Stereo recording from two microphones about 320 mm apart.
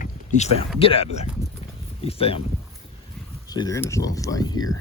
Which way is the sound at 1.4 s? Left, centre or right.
Centre.